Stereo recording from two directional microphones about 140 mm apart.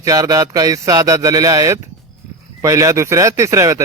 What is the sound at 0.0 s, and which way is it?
Speech, 25° right (ahead or behind).